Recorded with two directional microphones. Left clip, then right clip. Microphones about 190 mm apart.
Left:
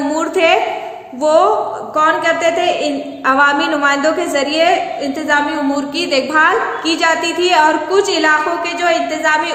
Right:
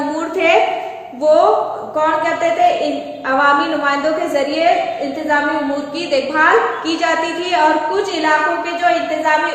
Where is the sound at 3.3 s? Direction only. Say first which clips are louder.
Left 1 dB; 35° left (ahead or behind).